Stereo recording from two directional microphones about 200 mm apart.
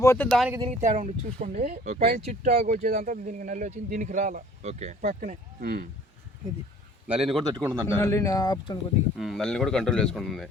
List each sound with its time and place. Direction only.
0.0 s speech: 15° left (ahead or behind)
0.3 s a man's voice: centre (ahead or behind)
0.6 s speech: 35° right (ahead or behind)
7.1 s a man's voice: centre (ahead or behind)
7.5 s speech: 15° right (ahead or behind)
7.9 s speech: 15° left (ahead or behind)
9.1 s a man's voice: centre (ahead or behind)